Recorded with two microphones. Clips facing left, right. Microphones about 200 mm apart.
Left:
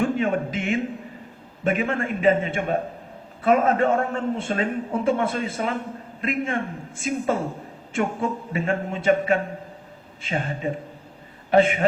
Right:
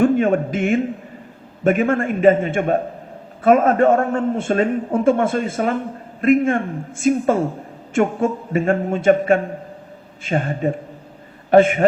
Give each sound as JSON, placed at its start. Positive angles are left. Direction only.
{"t": 0.0, "sound": "a man's voice", "side_deg": -50}